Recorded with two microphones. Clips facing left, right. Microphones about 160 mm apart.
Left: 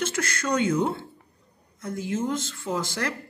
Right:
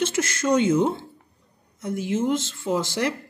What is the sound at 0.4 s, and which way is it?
Speech, 25° right (ahead or behind).